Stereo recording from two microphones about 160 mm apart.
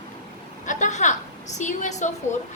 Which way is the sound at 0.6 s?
50° left (ahead or behind).